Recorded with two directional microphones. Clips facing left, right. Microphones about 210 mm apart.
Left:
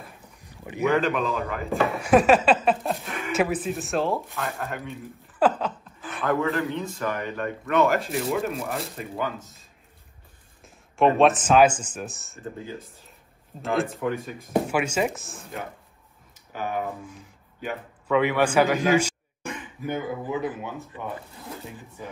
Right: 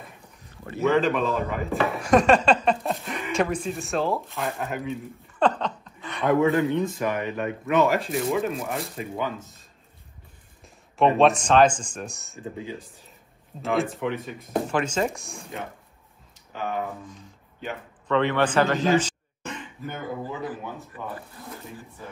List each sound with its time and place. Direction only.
0.5 s speech: 15° left (ahead or behind)
1.0 s speech: centre (ahead or behind)
10.6 s speech: centre (ahead or behind); by 22.1 s 15° left (ahead or behind)